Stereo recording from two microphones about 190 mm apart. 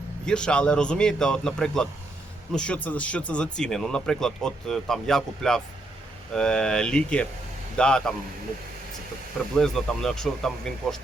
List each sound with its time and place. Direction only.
0.3 s speech: 5° left (ahead or behind)
9.6 s speech: centre (ahead or behind)